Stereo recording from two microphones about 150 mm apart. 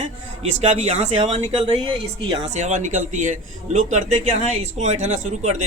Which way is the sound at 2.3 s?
45° right (ahead or behind).